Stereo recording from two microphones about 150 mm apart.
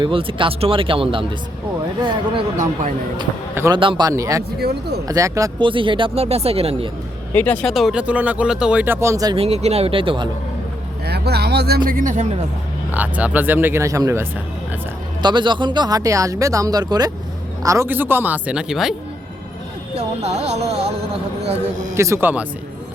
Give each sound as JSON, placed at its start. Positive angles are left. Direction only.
{"t": 0.0, "sound": "speech", "side_deg": -35}
{"t": 3.5, "sound": "speech", "side_deg": -15}
{"t": 3.8, "sound": "speech", "side_deg": -30}
{"t": 4.6, "sound": "speech", "side_deg": -90}
{"t": 5.0, "sound": "speech", "side_deg": -20}
{"t": 5.5, "sound": "speech", "side_deg": -35}
{"t": 7.3, "sound": "speech", "side_deg": 10}
{"t": 9.3, "sound": "speech", "side_deg": -40}
{"t": 11.0, "sound": "speech", "side_deg": -90}
{"t": 11.9, "sound": "speech", "side_deg": -60}
{"t": 12.9, "sound": "speech", "side_deg": -10}
{"t": 15.2, "sound": "speech", "side_deg": -30}
{"t": 20.0, "sound": "music", "side_deg": -45}
{"t": 21.9, "sound": "speech", "side_deg": -20}